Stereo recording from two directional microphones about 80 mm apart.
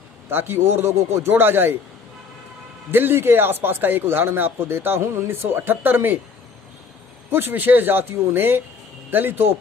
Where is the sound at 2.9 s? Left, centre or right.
Right.